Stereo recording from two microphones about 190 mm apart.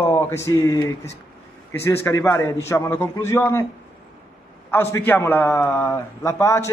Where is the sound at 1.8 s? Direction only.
15° left (ahead or behind).